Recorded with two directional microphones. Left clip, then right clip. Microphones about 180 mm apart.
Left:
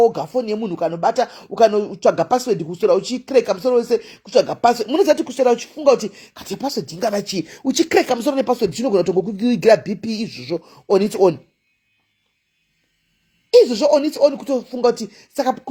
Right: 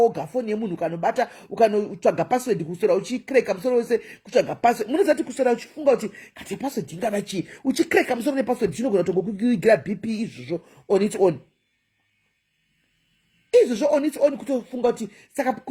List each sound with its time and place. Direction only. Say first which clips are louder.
0.0 s speech: left 5 dB; 30° left (ahead or behind)
13.5 s speech: left 5 dB; 30° left (ahead or behind)